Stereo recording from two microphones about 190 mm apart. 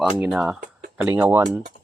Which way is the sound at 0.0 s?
5° right (ahead or behind).